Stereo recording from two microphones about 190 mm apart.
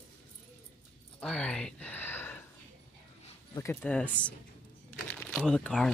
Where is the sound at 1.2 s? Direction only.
5° left (ahead or behind).